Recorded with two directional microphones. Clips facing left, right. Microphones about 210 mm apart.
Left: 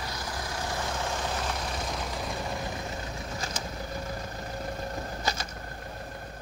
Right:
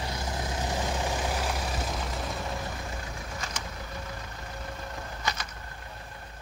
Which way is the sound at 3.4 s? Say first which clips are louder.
Left 3 dB; 35° left (ahead or behind).